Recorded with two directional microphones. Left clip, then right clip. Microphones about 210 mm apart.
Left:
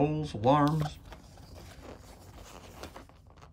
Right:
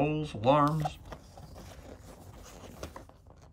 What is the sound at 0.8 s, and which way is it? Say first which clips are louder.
Shuffling cards: right 5 dB; 30° right (ahead or behind).